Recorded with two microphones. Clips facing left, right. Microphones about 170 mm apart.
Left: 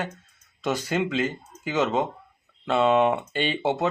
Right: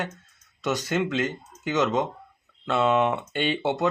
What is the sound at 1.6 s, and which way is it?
Speech, 10° left (ahead or behind).